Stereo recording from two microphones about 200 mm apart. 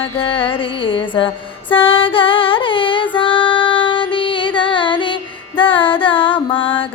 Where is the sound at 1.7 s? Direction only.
25° left (ahead or behind).